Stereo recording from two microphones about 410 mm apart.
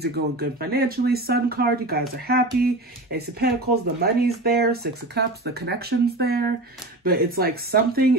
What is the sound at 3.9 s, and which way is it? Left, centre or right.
Speech, right.